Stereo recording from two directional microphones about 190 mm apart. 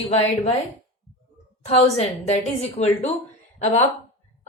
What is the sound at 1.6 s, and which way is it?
A woman's voice, 35° left (ahead or behind).